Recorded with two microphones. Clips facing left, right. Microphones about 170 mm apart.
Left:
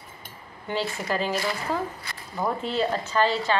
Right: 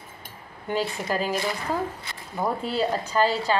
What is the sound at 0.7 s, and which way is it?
Speech, 10° right (ahead or behind).